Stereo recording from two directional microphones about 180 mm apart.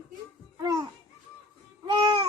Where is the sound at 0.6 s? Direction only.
20° right (ahead or behind).